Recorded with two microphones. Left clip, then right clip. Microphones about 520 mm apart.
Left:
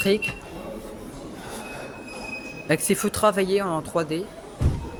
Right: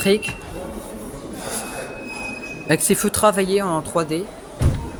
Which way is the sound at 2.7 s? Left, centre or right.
Left.